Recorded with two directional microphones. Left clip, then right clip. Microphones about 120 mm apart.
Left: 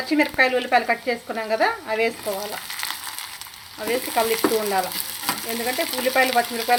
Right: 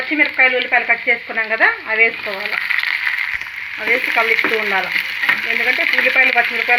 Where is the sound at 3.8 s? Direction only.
15° left (ahead or behind).